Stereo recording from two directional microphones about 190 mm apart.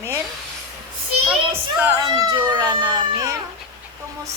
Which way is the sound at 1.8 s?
20° right (ahead or behind).